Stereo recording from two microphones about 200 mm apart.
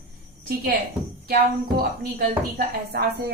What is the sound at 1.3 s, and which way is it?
A woman's voice, 50° right (ahead or behind).